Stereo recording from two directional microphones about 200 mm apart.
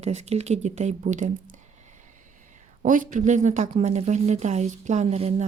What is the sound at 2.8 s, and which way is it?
Speech, 40° right (ahead or behind).